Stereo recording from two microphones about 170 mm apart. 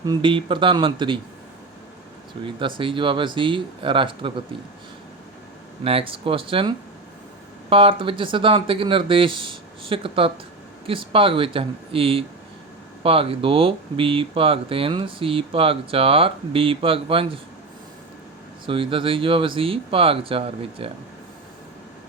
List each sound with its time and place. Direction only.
0.0 s speech: 25° right (ahead or behind)
2.6 s speech: 30° right (ahead or behind)
5.8 s speech: 35° right (ahead or behind)
18.6 s speech: 30° right (ahead or behind)